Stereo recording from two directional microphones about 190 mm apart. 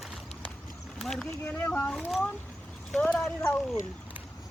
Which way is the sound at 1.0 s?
5° left (ahead or behind).